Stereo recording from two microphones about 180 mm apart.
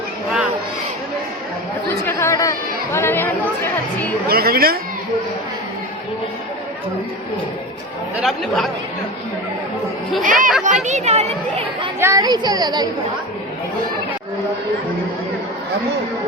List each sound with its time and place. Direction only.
2.0 s chatter: 15° left (ahead or behind)
4.3 s speech: 60° right (ahead or behind)
8.2 s speech: centre (ahead or behind)
10.2 s speech: 45° right (ahead or behind)
11.9 s a woman's voice: 15° right (ahead or behind)